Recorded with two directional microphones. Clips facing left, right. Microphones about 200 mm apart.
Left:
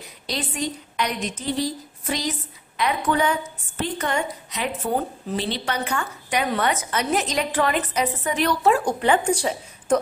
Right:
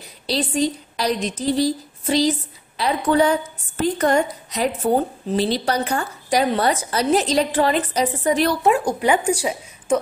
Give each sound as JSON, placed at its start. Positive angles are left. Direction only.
{"t": 0.3, "sound": "a woman's voice", "side_deg": -35}
{"t": 8.6, "sound": "speech", "side_deg": -15}